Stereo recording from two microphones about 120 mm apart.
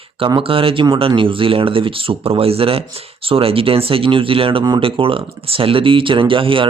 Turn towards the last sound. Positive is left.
turn(degrees=-45)  # may be behind; listen again after turning